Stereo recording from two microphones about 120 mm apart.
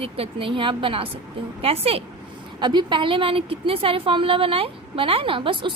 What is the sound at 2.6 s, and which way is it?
A woman's voice, 40° right (ahead or behind).